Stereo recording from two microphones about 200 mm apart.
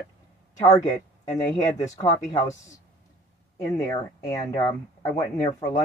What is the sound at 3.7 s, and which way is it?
Speech, 15° left (ahead or behind).